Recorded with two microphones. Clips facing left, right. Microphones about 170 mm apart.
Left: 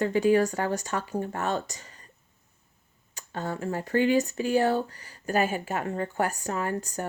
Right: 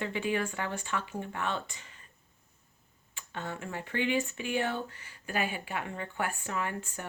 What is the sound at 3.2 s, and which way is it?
Speech, 40° left (ahead or behind).